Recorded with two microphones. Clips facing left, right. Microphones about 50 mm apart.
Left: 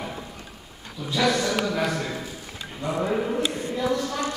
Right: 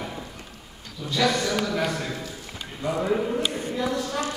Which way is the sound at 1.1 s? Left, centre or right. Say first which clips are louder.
Left 1 dB; centre.